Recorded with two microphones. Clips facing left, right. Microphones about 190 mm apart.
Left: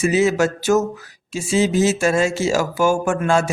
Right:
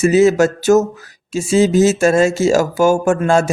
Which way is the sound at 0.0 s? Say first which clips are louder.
Right 6 dB; 45° right (ahead or behind).